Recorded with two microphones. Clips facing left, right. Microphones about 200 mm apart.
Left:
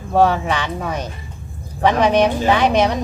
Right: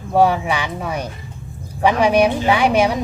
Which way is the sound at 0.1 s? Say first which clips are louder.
Even; 10° right (ahead or behind).